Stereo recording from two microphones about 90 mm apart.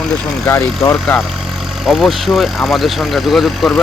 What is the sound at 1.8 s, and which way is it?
Speech, 5° right (ahead or behind).